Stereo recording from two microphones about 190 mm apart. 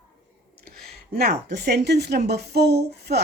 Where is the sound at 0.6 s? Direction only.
55° right (ahead or behind).